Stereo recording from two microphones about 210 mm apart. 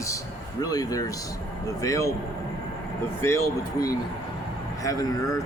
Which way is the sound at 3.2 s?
15° left (ahead or behind).